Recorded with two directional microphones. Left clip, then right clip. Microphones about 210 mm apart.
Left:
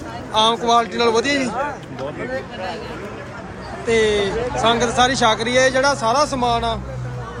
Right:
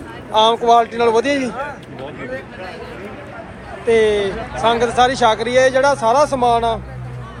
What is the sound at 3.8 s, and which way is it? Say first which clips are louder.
A man's voice: right 3 dB; 5° left (ahead or behind).